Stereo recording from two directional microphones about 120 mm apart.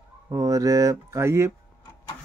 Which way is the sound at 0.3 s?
30° right (ahead or behind).